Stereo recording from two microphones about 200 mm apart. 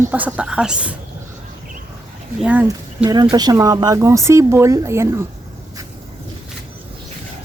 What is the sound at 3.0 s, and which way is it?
Speech, 20° right (ahead or behind).